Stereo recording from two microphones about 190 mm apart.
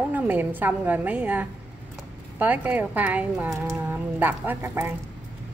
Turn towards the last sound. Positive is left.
turn(degrees=-10)  # may be behind; listen again after turning